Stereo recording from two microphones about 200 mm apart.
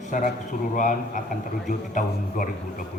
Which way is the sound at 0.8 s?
40° left (ahead or behind).